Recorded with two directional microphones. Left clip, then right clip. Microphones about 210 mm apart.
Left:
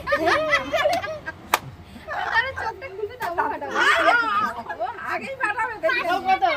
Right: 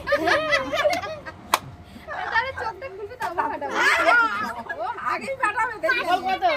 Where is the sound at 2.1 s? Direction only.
15° left (ahead or behind).